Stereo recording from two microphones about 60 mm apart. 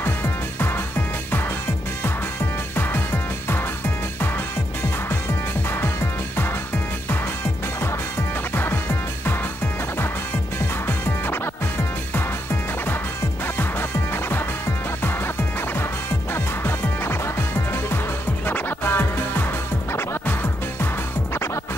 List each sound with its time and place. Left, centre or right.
0.0 s music: left
2.7 s music: left
10.9 s music: left
13.6 s music: left
16.3 s music: left